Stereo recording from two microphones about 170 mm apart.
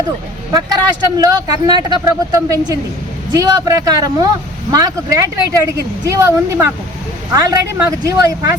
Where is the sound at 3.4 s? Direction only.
20° right (ahead or behind).